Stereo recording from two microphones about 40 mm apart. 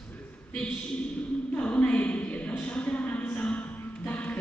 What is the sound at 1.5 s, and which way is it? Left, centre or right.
A woman's voice, left.